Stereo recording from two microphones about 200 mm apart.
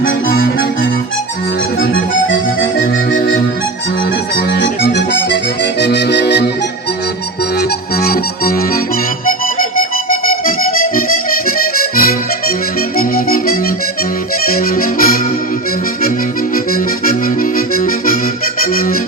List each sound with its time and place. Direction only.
0.0 s music: 45° left (ahead or behind)
1.9 s accordion: 70° left (ahead or behind)
4.4 s accordion: 60° left (ahead or behind)
7.9 s accordion: 50° left (ahead or behind)
9.7 s music: 45° left (ahead or behind)
11.4 s accordion: 45° left (ahead or behind)
13.0 s music: 45° left (ahead or behind)
14.4 s accordion: 45° left (ahead or behind)
17.1 s accordion: 45° left (ahead or behind)